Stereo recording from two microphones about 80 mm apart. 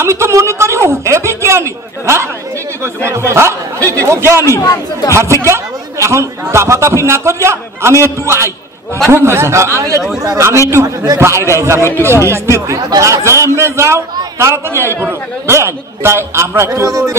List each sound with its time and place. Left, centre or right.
0.0 s a man's voice: right
4.4 s speech: left
5.1 s a man's voice: right